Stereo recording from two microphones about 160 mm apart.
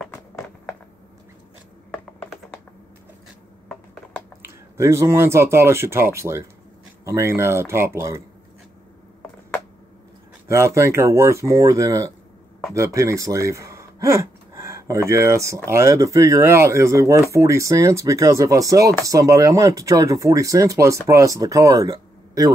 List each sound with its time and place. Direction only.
4.4 s speech: 15° right (ahead or behind)
10.5 s speech: 15° right (ahead or behind)